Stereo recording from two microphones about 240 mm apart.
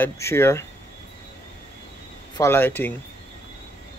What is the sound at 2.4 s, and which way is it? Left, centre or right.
Speech, centre.